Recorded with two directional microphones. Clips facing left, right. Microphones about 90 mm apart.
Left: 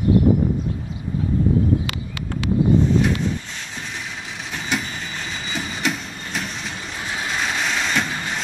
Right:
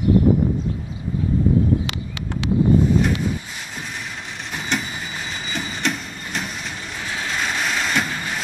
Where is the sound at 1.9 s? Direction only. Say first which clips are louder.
Even; 20° right (ahead or behind).